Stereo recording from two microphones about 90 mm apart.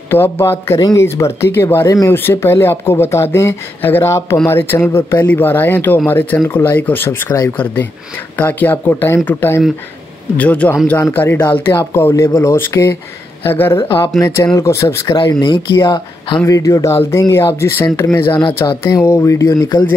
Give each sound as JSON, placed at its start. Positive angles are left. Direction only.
{"t": 0.1, "sound": "a man's voice", "side_deg": 25}
{"t": 11.9, "sound": "speech", "side_deg": 30}
{"t": 13.8, "sound": "speech", "side_deg": 65}
{"t": 14.2, "sound": "speech", "side_deg": 40}
{"t": 15.1, "sound": "speech", "side_deg": 55}
{"t": 16.4, "sound": "speech", "side_deg": 40}
{"t": 18.3, "sound": "speech", "side_deg": 70}
{"t": 18.9, "sound": "speech", "side_deg": 35}